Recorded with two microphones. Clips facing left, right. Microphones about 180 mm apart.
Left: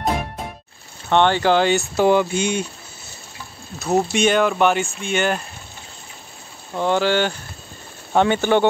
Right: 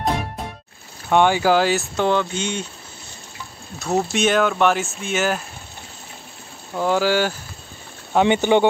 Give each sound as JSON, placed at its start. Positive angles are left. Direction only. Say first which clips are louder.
{"t": 1.0, "sound": "speech", "louder": "even", "side_deg": -10}
{"t": 2.0, "sound": "speech", "louder": "left 5 dB", "side_deg": 10}
{"t": 3.8, "sound": "speech", "louder": "left 2 dB", "side_deg": 0}
{"t": 6.7, "sound": "speech", "louder": "even", "side_deg": -5}
{"t": 8.3, "sound": "speech", "louder": "right 1 dB", "side_deg": -15}